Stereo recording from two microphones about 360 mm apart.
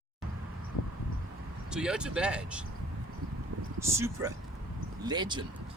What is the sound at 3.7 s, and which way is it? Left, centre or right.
Speech, centre.